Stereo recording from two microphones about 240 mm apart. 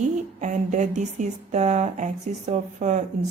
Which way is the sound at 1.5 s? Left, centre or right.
Right.